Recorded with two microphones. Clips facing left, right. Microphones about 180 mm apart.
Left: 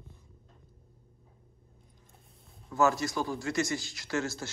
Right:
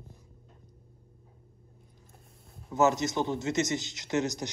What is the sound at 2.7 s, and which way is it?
A man's voice, 20° right (ahead or behind).